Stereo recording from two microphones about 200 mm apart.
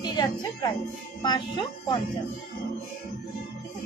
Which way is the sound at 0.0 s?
20° left (ahead or behind).